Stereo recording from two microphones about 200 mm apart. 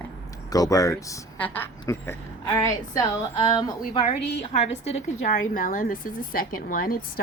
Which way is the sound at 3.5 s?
25° left (ahead or behind).